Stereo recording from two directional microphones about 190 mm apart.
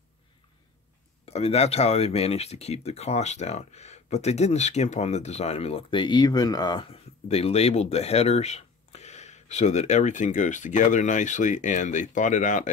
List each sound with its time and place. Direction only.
1.2 s speech: 35° left (ahead or behind)